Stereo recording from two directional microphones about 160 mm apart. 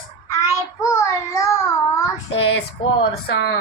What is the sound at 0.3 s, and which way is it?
Child singing, 20° left (ahead or behind).